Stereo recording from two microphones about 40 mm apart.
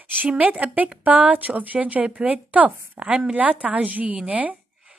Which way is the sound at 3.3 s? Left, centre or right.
Right.